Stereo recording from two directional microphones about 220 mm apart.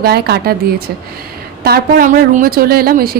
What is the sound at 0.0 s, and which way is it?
Speech, 45° right (ahead or behind).